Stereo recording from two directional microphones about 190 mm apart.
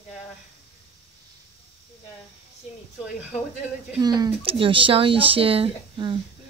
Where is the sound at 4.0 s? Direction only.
20° right (ahead or behind).